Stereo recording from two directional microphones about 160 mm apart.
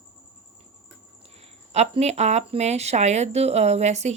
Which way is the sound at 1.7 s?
40° right (ahead or behind).